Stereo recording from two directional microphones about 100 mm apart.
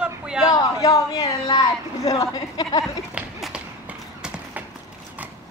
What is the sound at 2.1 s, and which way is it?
Speech, 40° left (ahead or behind).